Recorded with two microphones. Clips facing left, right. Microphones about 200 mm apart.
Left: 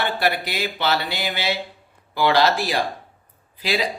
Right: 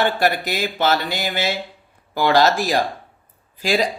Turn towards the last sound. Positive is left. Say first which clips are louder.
# right 4 dB
turn(degrees=-45)  # may be behind; listen again after turning